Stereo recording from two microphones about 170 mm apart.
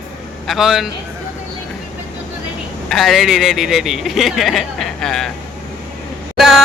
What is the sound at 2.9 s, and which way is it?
Speech, centre (ahead or behind).